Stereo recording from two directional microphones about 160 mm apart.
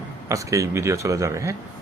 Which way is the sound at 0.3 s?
20° right (ahead or behind).